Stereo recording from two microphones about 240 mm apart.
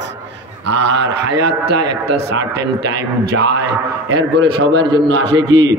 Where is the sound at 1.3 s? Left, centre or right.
Right.